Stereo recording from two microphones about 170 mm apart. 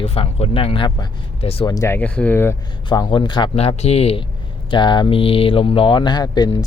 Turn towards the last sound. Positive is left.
turn(degrees=25)  # may be behind; listen again after turning